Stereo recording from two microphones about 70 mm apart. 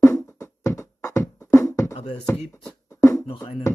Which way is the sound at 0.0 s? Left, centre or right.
Left.